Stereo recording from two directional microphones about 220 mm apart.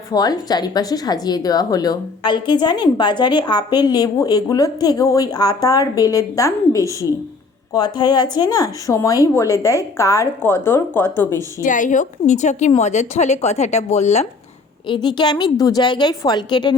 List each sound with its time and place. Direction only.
0.1 s a woman's voice: 15° left (ahead or behind)
11.6 s a woman's voice: 35° left (ahead or behind); by 16.7 s 20° left (ahead or behind)